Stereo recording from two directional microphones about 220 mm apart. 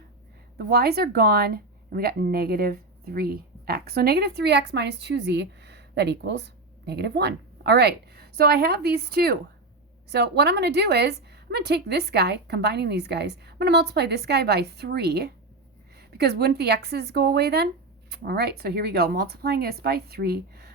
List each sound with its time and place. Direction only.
0.7 s a woman's voice: 45° right (ahead or behind)